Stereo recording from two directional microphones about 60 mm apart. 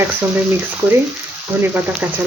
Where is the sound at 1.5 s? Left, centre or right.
Right.